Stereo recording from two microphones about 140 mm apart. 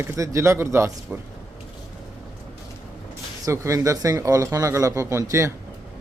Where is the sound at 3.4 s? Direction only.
20° right (ahead or behind).